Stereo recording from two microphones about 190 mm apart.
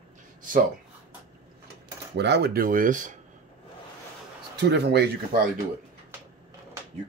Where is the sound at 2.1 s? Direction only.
60° right (ahead or behind); by 3.2 s 40° right (ahead or behind).